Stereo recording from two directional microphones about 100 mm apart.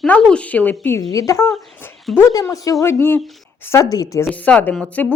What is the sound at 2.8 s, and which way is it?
Speech, 25° left (ahead or behind).